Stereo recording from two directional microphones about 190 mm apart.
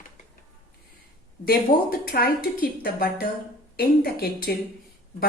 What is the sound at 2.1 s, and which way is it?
Speech, 50° left (ahead or behind).